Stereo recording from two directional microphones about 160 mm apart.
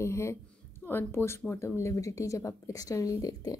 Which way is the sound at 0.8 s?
15° left (ahead or behind).